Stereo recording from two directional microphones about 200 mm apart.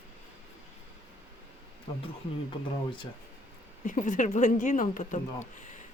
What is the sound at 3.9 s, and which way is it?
Speech, 40° left (ahead or behind).